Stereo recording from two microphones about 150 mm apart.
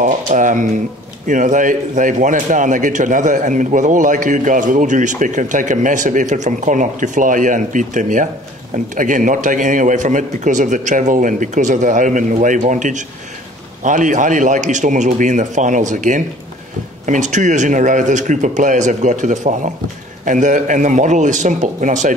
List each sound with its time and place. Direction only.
0.0 s a man's voice: 60° right (ahead or behind)